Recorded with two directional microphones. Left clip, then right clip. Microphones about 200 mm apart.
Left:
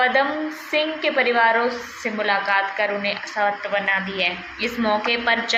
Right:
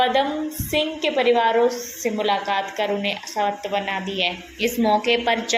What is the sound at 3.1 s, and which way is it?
A woman's voice, 40° right (ahead or behind).